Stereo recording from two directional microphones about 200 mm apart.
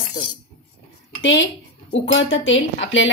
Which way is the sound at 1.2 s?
70° left (ahead or behind).